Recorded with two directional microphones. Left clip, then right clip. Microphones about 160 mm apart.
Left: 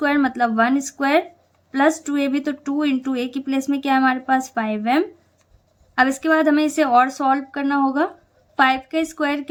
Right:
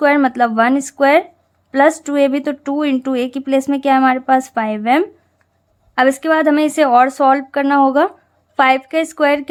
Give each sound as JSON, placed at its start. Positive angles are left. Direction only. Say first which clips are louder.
{"t": 0.0, "sound": "speech", "louder": "right 6 dB", "side_deg": -35}